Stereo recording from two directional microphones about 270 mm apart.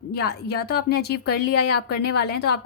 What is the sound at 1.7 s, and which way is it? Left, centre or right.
Speech, left.